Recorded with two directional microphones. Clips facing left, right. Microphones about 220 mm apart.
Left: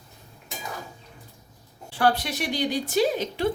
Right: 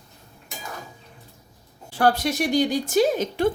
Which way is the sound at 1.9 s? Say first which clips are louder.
Right 3 dB; 45° right (ahead or behind).